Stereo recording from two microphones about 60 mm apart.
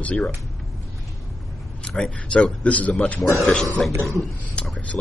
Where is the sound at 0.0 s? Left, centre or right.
Left.